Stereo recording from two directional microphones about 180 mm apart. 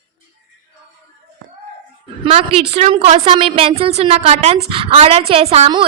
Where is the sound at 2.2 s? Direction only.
30° right (ahead or behind).